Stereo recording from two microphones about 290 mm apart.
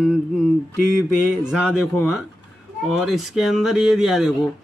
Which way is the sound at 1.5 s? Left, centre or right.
Centre.